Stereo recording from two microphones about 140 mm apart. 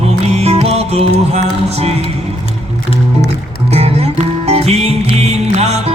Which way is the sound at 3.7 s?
45° right (ahead or behind).